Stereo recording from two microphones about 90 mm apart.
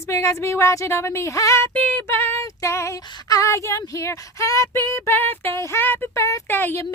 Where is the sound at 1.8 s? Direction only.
20° left (ahead or behind).